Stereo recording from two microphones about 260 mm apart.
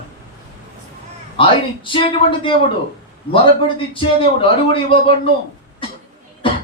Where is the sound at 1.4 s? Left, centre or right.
Centre.